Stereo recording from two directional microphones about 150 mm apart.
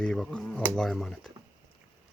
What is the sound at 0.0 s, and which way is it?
Speech, 5° left (ahead or behind).